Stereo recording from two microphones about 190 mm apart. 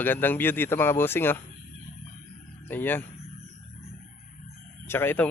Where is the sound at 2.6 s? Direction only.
10° left (ahead or behind).